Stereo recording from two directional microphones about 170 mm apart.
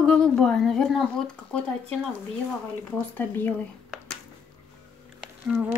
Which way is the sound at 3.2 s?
10° left (ahead or behind).